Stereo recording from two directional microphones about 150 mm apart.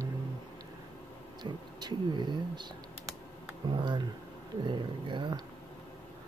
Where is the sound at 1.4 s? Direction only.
30° right (ahead or behind).